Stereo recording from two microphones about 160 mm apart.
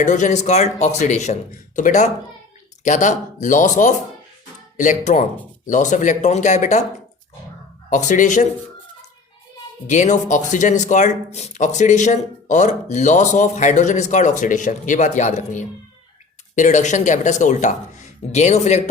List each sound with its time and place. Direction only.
0.0 s speech: 50° left (ahead or behind)
7.9 s speech: 50° left (ahead or behind)
9.9 s speech: 50° left (ahead or behind)